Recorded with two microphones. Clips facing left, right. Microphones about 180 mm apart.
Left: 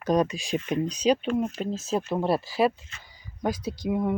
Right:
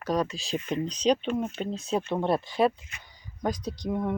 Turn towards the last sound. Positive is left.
turn(degrees=5)  # may be behind; listen again after turning